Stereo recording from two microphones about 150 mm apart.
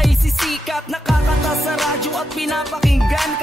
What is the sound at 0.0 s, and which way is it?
Music, centre (ahead or behind).